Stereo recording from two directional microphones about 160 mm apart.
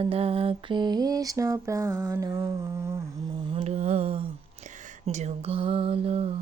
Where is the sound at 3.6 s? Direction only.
45° right (ahead or behind).